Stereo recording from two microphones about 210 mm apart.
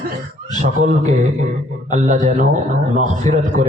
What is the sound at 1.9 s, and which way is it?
A man's voice, 35° right (ahead or behind).